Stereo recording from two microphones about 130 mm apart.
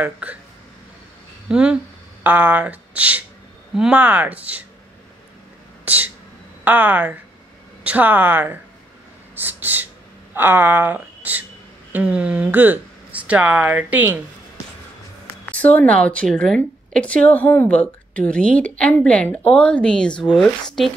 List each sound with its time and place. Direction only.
0.0 s speech: 10° right (ahead or behind)
1.5 s speech: 5° right (ahead or behind)
5.9 s a sound: 10° right (ahead or behind)
6.6 s speech: 15° right (ahead or behind)
9.3 s a sound: 15° right (ahead or behind)
10.3 s speech: 15° right (ahead or behind)
15.2 s speech: 10° left (ahead or behind)